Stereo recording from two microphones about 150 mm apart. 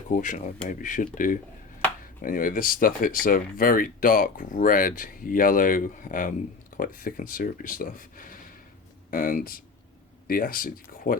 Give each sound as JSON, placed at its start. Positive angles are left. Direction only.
{"t": 0.1, "sound": "speech", "side_deg": 60}